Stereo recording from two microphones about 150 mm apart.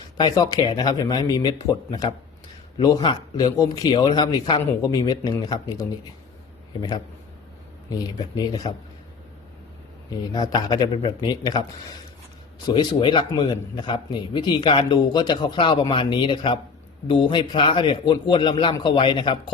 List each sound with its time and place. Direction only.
0.2 s a man's voice: 25° left (ahead or behind)
7.9 s a man's voice: 25° left (ahead or behind)
10.1 s a man's voice: 25° left (ahead or behind)
12.6 s speech: 35° left (ahead or behind)